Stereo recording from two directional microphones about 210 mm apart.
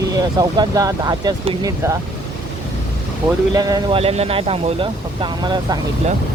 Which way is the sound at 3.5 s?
20° right (ahead or behind).